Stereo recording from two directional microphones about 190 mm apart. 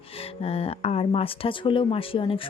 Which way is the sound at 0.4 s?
30° left (ahead or behind).